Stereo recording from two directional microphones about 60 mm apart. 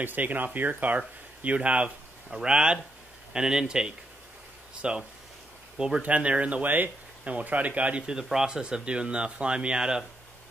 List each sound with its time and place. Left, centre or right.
0.0 s speech: right
8.1 s speech: centre